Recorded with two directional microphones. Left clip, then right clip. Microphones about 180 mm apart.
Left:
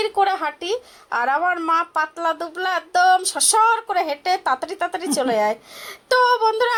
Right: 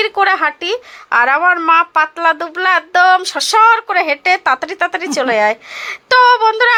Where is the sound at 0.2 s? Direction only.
15° right (ahead or behind).